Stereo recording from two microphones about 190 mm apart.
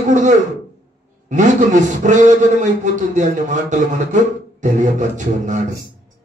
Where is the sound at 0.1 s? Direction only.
40° right (ahead or behind).